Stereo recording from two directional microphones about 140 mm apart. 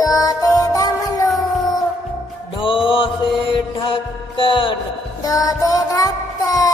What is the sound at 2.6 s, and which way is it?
Music, 40° left (ahead or behind).